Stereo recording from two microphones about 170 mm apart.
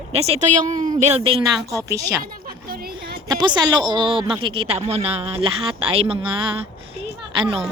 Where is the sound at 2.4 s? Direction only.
60° right (ahead or behind).